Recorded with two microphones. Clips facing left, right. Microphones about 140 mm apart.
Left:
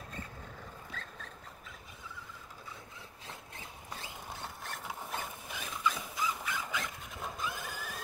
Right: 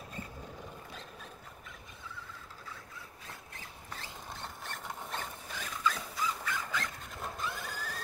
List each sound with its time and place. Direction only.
3.9 s zipper: 10° left (ahead or behind)
5.5 s dog: 15° left (ahead or behind)
7.7 s a sound: 15° left (ahead or behind)